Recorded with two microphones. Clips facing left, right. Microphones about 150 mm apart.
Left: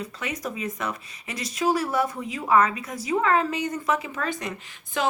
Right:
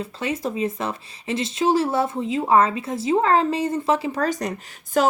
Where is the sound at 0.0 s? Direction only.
30° right (ahead or behind).